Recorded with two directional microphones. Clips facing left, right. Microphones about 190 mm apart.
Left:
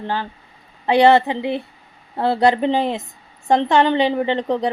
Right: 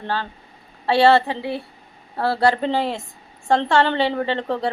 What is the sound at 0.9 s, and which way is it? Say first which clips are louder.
A woman's voice: left 2 dB; 20° left (ahead or behind).